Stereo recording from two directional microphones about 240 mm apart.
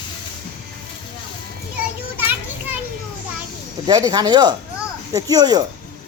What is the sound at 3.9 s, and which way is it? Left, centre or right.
Speech, centre.